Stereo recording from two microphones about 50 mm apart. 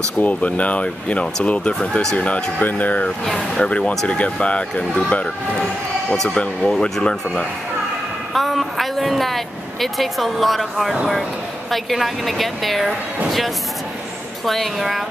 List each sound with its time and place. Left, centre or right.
0.2 s speech: left
3.3 s speech: centre
3.6 s speech: left
5.6 s speech: centre
6.3 s speech: left
8.3 s speech: centre
14.4 s speech: centre